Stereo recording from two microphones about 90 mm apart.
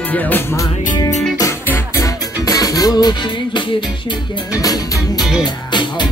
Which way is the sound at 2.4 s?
40° left (ahead or behind).